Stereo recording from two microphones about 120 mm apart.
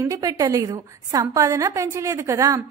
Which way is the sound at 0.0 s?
30° right (ahead or behind).